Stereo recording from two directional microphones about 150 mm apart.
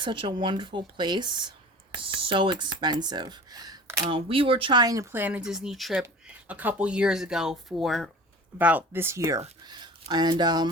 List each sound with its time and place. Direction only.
0.0 s speech: 35° right (ahead or behind)
4.1 s speech: 35° right (ahead or behind); by 8.1 s centre (ahead or behind)
8.5 s speech: 10° right (ahead or behind)
9.6 s speech: 30° right (ahead or behind)